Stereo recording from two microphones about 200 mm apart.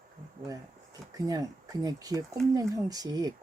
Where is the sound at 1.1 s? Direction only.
20° right (ahead or behind).